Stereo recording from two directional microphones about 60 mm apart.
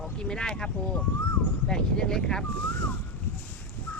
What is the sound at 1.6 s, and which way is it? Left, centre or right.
Speech, centre.